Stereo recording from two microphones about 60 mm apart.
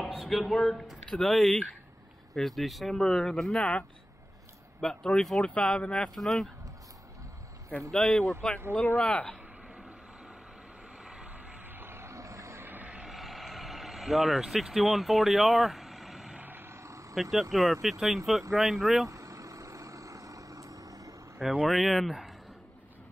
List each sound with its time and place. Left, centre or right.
0.0 s speech: centre
4.7 s speech: centre
6.0 s speech: centre
7.9 s speech: centre
8.2 s speech: centre
11.2 s vehicle: right
12.6 s vehicle: right
13.0 s vehicle: centre
16.3 s a sound: right
16.7 s vehicle: right
17.1 s speech: centre
19.0 s vehicle: right
21.4 s speech: centre